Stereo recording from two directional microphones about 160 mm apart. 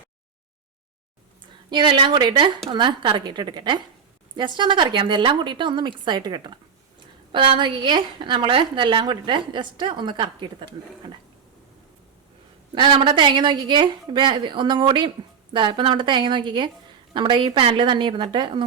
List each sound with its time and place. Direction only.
1.7 s a woman's voice: 30° right (ahead or behind)
12.7 s a woman's voice: 30° right (ahead or behind)